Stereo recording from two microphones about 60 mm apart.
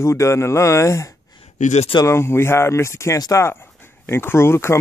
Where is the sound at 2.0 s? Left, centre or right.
Left.